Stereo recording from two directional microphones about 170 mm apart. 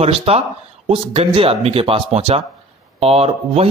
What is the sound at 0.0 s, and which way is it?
A man's voice, 35° right (ahead or behind).